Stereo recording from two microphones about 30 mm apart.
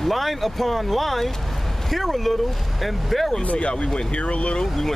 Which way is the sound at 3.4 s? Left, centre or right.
Left.